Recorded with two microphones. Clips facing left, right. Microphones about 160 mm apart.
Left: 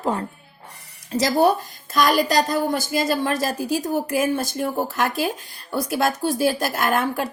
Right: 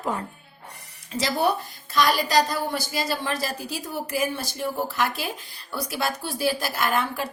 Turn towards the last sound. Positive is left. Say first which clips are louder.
# left 4 dB
turn(degrees=50)  # may be behind; listen again after turning